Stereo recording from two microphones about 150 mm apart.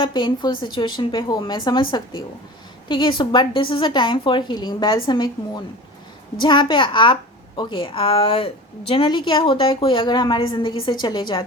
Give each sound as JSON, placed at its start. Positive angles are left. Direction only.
{"t": 0.0, "sound": "a woman's voice", "side_deg": 30}